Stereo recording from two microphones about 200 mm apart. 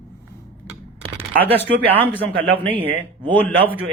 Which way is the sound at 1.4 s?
10° left (ahead or behind).